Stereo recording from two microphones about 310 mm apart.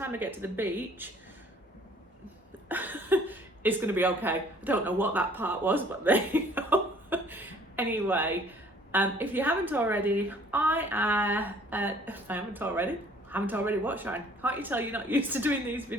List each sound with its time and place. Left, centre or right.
0.0 s speech: centre
2.6 s speech: centre